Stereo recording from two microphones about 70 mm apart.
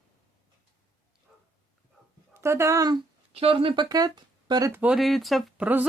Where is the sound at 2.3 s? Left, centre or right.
Right.